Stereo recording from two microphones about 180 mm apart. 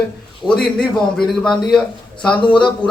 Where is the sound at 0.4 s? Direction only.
5° left (ahead or behind).